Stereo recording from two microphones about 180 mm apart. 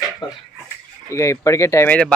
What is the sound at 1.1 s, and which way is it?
Speech, 15° left (ahead or behind).